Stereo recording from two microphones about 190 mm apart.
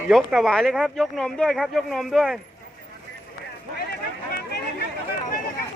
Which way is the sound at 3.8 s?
60° left (ahead or behind).